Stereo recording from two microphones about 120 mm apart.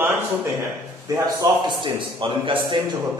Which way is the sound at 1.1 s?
35° right (ahead or behind).